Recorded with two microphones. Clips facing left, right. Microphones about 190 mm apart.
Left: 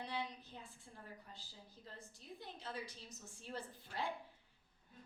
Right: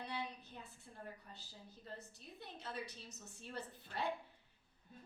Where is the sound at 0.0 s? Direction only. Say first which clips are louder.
Left 1 dB; 60° right (ahead or behind).